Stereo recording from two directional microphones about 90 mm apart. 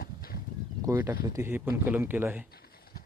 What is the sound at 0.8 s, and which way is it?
Speech, 30° right (ahead or behind).